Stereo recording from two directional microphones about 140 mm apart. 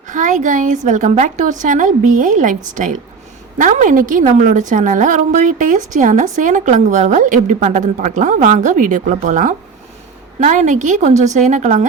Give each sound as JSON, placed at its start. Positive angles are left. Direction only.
{"t": 0.1, "sound": "a woman's voice", "side_deg": -65}